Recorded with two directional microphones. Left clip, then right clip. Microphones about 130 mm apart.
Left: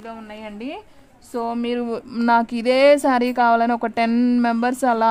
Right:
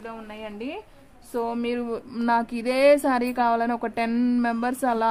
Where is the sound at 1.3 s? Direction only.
50° left (ahead or behind).